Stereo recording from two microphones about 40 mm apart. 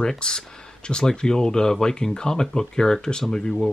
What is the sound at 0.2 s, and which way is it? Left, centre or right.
Speech, centre.